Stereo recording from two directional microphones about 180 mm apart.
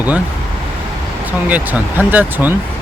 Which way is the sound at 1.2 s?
10° right (ahead or behind).